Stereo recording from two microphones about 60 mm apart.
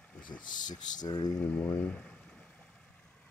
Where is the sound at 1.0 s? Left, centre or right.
Left.